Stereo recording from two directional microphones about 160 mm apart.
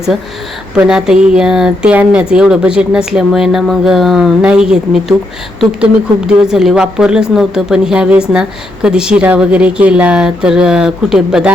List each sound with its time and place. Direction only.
0.8 s speech: 5° right (ahead or behind)